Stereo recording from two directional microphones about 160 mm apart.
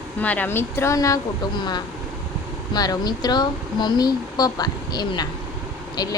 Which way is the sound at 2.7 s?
25° left (ahead or behind).